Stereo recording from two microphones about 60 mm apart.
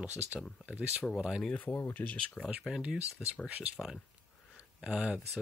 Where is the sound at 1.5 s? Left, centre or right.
Left.